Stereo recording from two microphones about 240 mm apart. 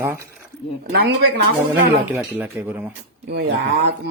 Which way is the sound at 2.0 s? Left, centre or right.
Centre.